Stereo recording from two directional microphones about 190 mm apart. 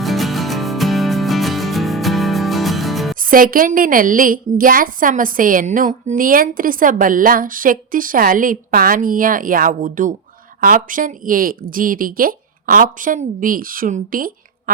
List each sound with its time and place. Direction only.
0.0 s music: centre (ahead or behind)
3.2 s a woman's voice: 45° right (ahead or behind)